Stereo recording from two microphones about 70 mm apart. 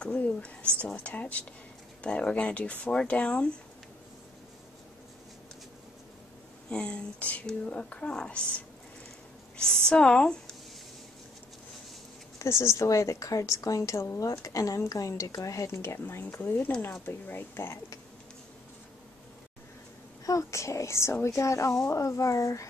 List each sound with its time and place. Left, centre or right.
0.0 s speech: centre
6.7 s speech: centre
12.4 s a woman's voice: left
20.2 s a woman's voice: left